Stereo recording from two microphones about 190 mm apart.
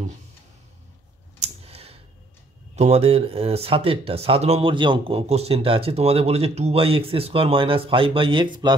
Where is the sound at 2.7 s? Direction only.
35° right (ahead or behind).